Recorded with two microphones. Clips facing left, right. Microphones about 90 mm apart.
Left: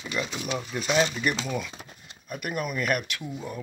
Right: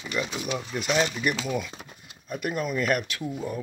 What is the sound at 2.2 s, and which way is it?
Speech, 25° right (ahead or behind).